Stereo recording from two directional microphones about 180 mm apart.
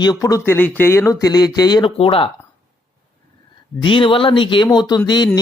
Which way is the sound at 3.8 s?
30° left (ahead or behind).